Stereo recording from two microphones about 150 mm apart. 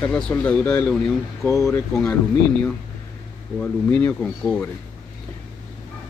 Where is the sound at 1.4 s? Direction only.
20° left (ahead or behind).